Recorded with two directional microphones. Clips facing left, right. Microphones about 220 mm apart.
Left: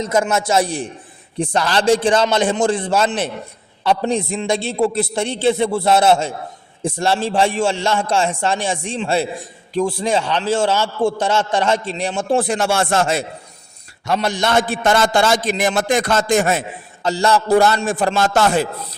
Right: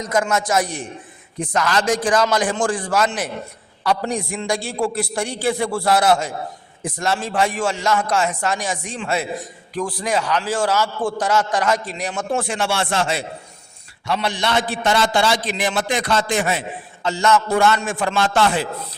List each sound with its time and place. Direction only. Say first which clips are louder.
0.0 s a man's voice: left 3 dB; 25° left (ahead or behind); by 18.7 s 45° left (ahead or behind)